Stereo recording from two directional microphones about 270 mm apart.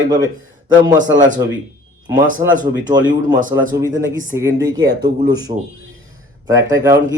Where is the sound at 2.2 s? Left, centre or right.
Right.